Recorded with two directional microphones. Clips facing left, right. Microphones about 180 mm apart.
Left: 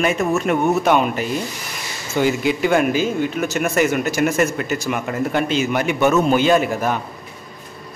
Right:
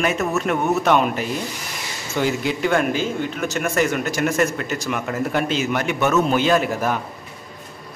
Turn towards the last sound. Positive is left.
turn(degrees=0)  # may be behind; listen again after turning